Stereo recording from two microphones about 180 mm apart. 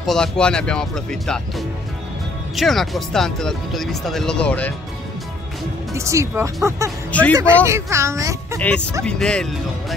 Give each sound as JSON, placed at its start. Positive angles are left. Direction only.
{"t": 0.0, "sound": "speech", "side_deg": 5}
{"t": 5.9, "sound": "speech", "side_deg": -15}
{"t": 7.1, "sound": "speech", "side_deg": 10}
{"t": 7.6, "sound": "speech", "side_deg": -15}
{"t": 8.5, "sound": "speech", "side_deg": 5}